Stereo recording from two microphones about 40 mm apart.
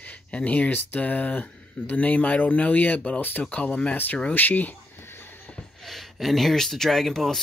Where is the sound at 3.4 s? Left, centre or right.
Left.